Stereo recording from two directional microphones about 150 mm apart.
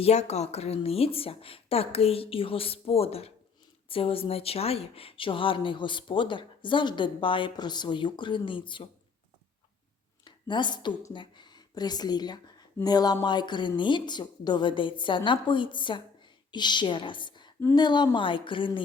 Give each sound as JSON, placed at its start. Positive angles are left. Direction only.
{"t": 0.0, "sound": "speech", "side_deg": 45}
{"t": 10.2, "sound": "a woman's voice", "side_deg": 30}